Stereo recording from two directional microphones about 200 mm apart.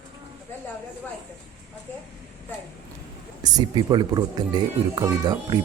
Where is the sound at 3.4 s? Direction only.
20° right (ahead or behind).